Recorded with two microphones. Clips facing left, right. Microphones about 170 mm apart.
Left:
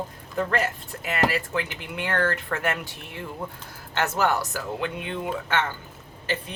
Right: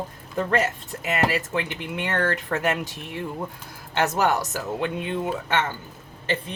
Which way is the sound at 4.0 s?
20° right (ahead or behind).